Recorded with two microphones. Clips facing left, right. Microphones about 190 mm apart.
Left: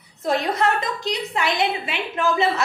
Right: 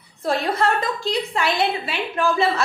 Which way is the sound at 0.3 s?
20° left (ahead or behind).